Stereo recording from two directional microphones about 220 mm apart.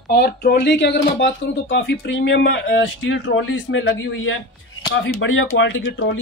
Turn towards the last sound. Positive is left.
turn(degrees=55)  # may be behind; listen again after turning